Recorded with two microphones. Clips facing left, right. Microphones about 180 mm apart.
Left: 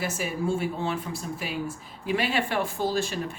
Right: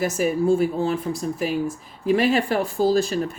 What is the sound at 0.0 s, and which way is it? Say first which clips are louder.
Speech: right 8 dB; 40° right (ahead or behind).